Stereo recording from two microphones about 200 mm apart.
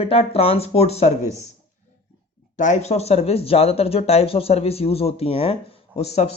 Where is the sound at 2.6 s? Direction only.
35° left (ahead or behind).